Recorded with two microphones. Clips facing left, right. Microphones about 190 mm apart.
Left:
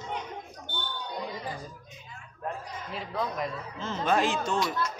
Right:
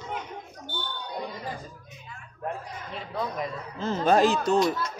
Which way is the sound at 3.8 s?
40° right (ahead or behind).